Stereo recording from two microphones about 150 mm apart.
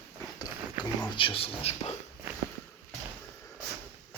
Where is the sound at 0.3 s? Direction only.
30° left (ahead or behind).